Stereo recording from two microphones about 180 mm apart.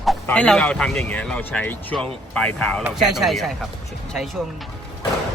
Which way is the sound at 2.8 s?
5° right (ahead or behind).